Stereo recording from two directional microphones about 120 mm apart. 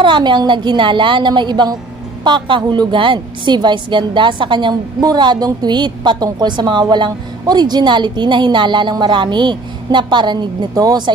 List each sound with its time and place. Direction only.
0.0 s a woman's voice: 40° right (ahead or behind)